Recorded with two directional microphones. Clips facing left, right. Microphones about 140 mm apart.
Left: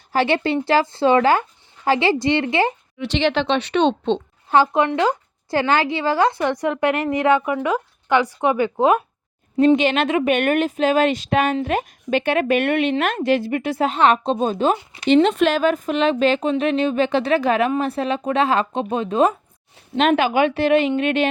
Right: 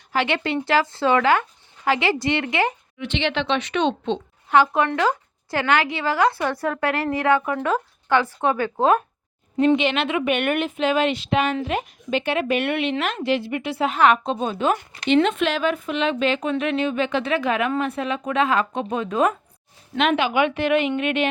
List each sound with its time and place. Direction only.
0.1 s speech: 35° left (ahead or behind); by 9.0 s 15° left (ahead or behind)
9.7 s a woman's voice: 45° left (ahead or behind)
13.9 s speech: 30° left (ahead or behind)
20.0 s speech: 45° left (ahead or behind)